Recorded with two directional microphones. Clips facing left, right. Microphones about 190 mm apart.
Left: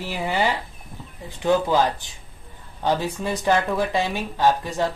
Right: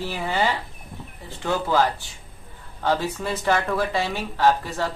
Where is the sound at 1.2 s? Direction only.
15° left (ahead or behind).